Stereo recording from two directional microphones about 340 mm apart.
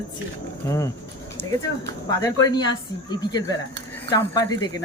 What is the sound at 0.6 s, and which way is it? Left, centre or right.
A man's voice, centre.